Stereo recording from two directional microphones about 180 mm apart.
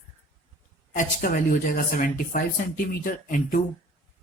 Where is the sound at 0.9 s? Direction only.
50° left (ahead or behind).